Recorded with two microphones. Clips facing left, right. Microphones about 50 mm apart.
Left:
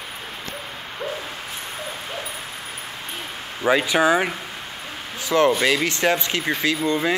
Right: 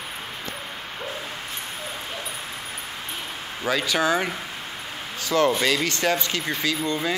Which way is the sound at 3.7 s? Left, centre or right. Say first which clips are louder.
Left 5 dB; left.